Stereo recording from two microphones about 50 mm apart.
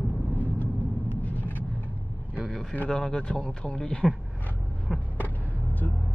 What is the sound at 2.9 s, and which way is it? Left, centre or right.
A man's voice, left.